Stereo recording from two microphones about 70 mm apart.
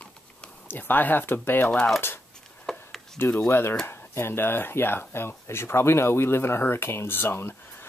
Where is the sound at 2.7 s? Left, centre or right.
Centre.